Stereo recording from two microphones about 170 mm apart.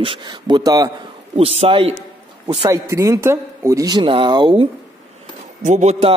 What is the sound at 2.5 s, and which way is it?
A man's voice, 20° right (ahead or behind).